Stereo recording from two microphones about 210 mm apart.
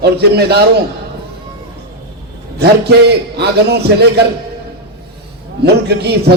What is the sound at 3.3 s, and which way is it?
Speech, 50° right (ahead or behind).